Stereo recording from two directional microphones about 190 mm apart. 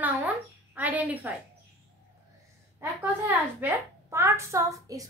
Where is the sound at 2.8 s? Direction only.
10° right (ahead or behind).